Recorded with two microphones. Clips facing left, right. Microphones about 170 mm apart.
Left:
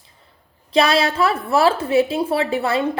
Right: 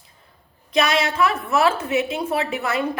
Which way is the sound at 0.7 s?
30° left (ahead or behind).